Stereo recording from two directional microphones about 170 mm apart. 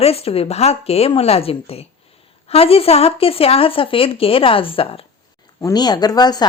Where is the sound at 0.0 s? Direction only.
35° left (ahead or behind).